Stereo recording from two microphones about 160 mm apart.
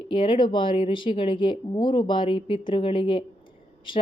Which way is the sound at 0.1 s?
30° left (ahead or behind).